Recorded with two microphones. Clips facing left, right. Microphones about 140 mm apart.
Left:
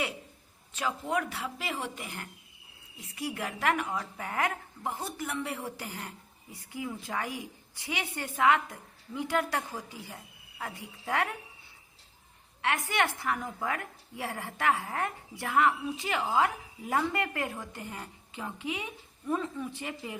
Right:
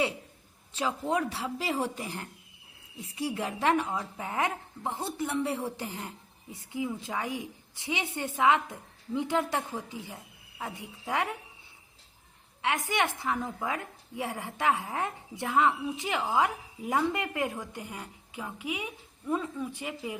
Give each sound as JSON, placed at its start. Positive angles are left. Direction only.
{"t": 0.8, "sound": "a woman's voice", "side_deg": -30}
{"t": 12.6, "sound": "a woman's voice", "side_deg": -20}